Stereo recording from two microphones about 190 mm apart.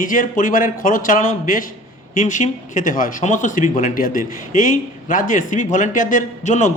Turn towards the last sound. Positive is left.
turn(degrees=40)  # may be behind; listen again after turning